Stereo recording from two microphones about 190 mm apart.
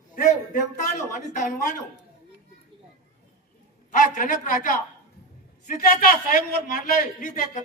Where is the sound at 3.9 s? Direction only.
45° left (ahead or behind).